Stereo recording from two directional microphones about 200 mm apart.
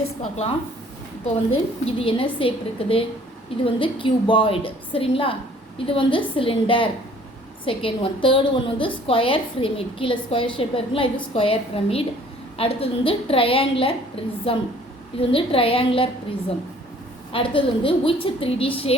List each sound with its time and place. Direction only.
0.2 s a woman's voice: 30° left (ahead or behind)
17.3 s a woman's voice: 25° left (ahead or behind)